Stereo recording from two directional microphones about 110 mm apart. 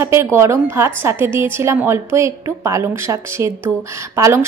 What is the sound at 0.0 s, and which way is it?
A woman's voice, 25° right (ahead or behind).